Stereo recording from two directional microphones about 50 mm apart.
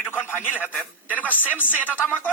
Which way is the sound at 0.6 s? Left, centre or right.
Left.